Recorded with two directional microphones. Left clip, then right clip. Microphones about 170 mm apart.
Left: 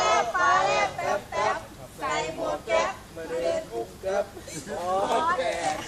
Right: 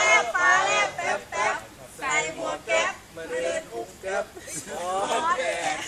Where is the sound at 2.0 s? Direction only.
5° right (ahead or behind).